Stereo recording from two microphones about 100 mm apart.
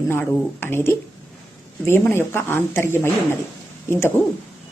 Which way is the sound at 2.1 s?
25° left (ahead or behind).